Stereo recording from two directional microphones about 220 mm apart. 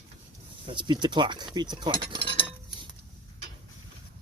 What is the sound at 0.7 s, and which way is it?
Speech, 20° right (ahead or behind).